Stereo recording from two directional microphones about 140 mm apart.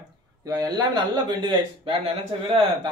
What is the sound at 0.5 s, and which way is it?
Speech, 25° right (ahead or behind).